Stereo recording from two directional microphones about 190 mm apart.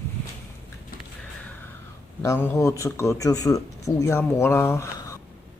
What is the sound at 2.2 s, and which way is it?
Speech, 15° left (ahead or behind).